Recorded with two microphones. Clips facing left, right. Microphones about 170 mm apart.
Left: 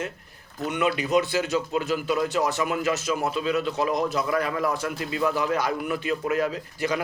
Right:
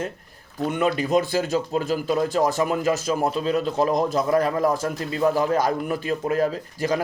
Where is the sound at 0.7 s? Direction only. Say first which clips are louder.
Right 2 dB; 40° right (ahead or behind).